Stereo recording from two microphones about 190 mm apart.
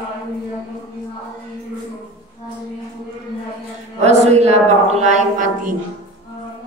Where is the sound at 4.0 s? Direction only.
35° right (ahead or behind).